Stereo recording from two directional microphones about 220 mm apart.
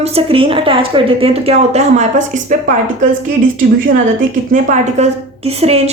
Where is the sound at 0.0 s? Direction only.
25° right (ahead or behind).